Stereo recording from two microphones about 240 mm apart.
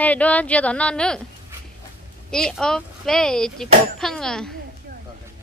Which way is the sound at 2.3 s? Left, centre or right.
Centre.